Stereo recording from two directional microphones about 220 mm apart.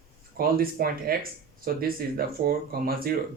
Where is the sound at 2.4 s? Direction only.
40° right (ahead or behind).